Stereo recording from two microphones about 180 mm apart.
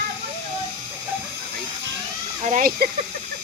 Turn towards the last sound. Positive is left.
turn(degrees=-55)  # may be behind; listen again after turning